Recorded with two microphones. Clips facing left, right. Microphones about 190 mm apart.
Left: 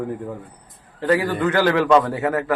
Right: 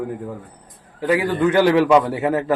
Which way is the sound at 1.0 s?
15° right (ahead or behind).